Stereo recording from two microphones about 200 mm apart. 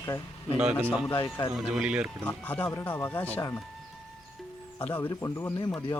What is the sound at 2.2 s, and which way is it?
Speech, 10° left (ahead or behind).